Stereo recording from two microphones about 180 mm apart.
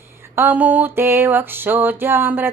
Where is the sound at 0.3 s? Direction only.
10° right (ahead or behind).